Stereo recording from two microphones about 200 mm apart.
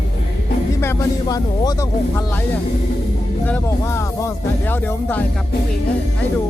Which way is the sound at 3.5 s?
15° left (ahead or behind).